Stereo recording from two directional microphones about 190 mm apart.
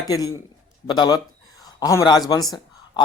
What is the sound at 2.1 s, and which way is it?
Speech, 20° left (ahead or behind).